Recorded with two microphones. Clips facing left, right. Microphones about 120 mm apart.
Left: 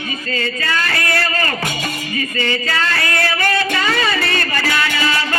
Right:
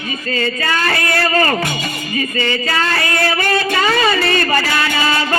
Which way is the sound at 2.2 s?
35° right (ahead or behind).